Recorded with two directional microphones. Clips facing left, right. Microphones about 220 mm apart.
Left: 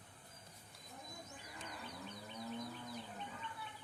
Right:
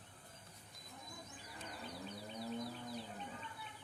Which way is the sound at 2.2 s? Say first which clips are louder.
Right 2 dB; 35° right (ahead or behind).